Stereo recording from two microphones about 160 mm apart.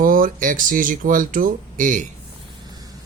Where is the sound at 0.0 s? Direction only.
60° right (ahead or behind).